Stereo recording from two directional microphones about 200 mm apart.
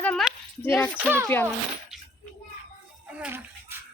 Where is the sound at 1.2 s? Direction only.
10° left (ahead or behind).